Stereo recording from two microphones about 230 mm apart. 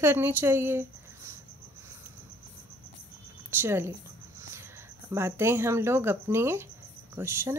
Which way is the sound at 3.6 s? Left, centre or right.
Centre.